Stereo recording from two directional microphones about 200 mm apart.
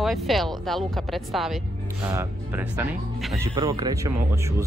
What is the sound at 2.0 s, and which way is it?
Speech, 10° right (ahead or behind).